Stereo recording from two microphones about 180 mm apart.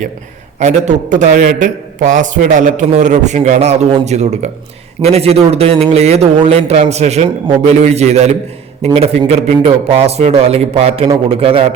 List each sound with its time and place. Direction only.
0.6 s a man's voice: 40° right (ahead or behind)